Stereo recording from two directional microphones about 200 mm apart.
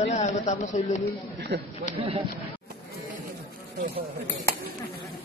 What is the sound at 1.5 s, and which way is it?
Speech, 60° right (ahead or behind).